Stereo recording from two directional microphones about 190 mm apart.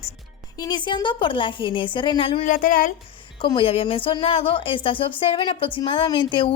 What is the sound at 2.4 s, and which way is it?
Speech, 45° left (ahead or behind).